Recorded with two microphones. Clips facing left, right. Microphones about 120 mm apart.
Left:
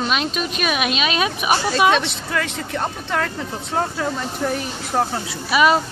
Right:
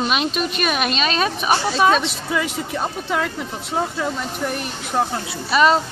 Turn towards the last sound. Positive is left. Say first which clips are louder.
# even
turn(degrees=5)  # may be behind; listen again after turning